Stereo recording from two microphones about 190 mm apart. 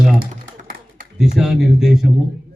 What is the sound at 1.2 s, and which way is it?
Speech, centre (ahead or behind).